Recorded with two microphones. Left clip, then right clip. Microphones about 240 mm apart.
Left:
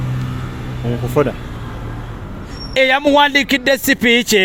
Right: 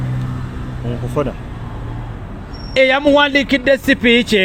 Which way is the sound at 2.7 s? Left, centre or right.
Left.